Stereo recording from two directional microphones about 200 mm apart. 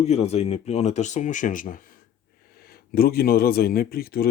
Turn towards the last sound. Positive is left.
turn(degrees=50)  # may be behind; listen again after turning